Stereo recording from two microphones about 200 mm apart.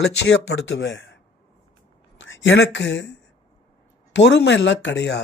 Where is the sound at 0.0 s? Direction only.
60° left (ahead or behind).